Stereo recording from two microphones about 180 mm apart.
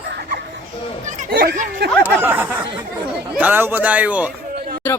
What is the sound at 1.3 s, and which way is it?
Speech, 65° right (ahead or behind).